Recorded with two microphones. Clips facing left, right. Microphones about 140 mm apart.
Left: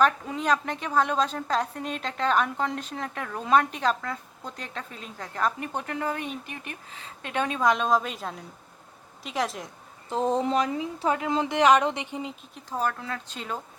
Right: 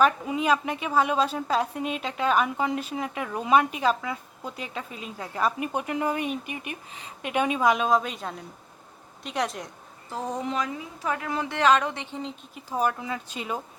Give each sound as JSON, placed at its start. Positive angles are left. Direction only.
{"t": 0.0, "sound": "a woman's voice", "side_deg": -10}
{"t": 10.1, "sound": "speech", "side_deg": 25}
{"t": 12.5, "sound": "a woman's voice", "side_deg": -10}